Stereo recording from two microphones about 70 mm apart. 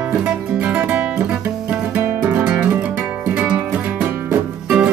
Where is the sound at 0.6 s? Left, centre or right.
Right.